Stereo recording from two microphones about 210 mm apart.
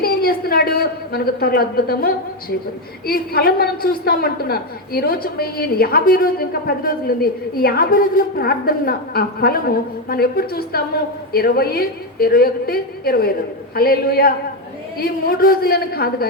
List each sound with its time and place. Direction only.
0.0 s a woman's voice: 45° left (ahead or behind)